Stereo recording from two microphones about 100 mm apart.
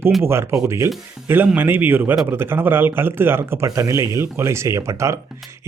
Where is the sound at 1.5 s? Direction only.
20° right (ahead or behind).